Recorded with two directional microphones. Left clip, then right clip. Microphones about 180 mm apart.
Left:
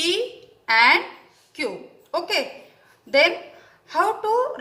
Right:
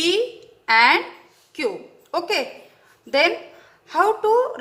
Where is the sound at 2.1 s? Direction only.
40° right (ahead or behind).